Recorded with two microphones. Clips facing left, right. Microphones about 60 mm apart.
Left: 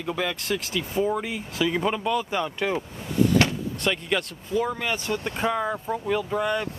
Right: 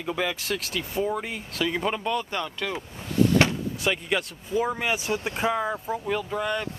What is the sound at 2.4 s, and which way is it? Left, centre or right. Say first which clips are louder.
Speech: left 4 dB; centre.